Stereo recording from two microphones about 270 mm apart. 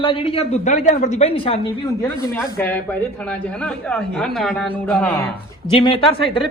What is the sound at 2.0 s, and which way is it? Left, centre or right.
A man's voice, centre.